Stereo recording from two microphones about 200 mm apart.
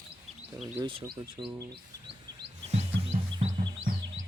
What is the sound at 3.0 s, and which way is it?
Music, 30° right (ahead or behind).